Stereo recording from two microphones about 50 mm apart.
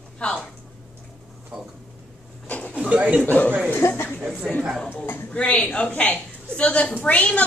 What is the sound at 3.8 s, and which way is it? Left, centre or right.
Speech, left.